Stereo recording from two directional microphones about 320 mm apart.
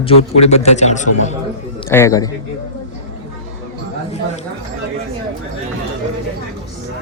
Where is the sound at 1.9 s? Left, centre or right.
Centre.